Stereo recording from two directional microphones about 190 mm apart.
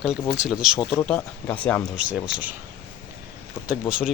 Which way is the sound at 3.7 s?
5° right (ahead or behind).